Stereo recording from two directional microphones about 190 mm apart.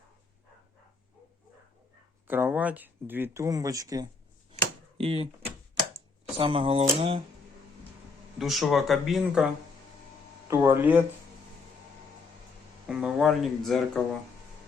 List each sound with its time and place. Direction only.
2.2 s speech: 10° right (ahead or behind)
4.5 s a sound: 30° right (ahead or behind)
6.3 s speech: 30° right (ahead or behind)
8.4 s speech: centre (ahead or behind)
10.5 s speech: 10° right (ahead or behind)
12.9 s speech: 5° right (ahead or behind)